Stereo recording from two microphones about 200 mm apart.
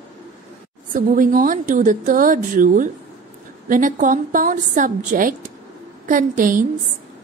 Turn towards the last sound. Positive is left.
turn(degrees=-40)  # may be behind; listen again after turning